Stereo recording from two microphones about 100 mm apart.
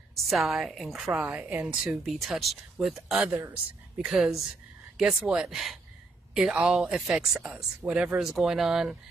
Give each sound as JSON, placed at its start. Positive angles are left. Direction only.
{"t": 0.3, "sound": "speech", "side_deg": 0}
{"t": 3.2, "sound": "a woman's voice", "side_deg": -20}
{"t": 4.0, "sound": "speech", "side_deg": -5}